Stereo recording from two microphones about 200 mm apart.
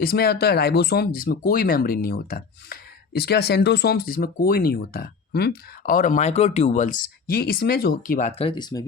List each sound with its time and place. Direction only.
0.0 s speech: 50° left (ahead or behind)
8.3 s speech: 30° left (ahead or behind)